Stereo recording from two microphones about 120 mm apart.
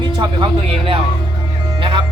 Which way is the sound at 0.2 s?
40° right (ahead or behind).